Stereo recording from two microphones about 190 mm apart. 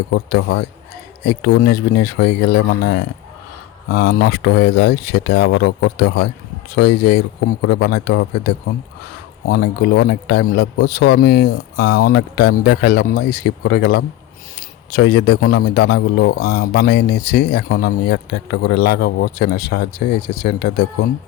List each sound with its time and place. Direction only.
0.1 s a man's voice: 80° left
1.2 s a man's voice: 65° left (ahead or behind)
9.5 s a man's voice: 60° left (ahead or behind)